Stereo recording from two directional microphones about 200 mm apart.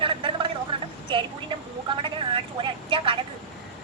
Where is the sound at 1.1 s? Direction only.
25° right (ahead or behind).